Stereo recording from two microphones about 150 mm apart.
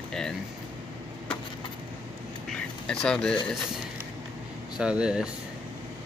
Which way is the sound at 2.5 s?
5° left (ahead or behind).